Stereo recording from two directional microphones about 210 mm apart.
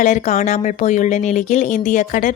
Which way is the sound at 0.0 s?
35° left (ahead or behind).